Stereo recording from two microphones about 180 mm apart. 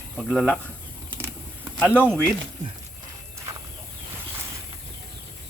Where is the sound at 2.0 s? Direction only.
10° right (ahead or behind).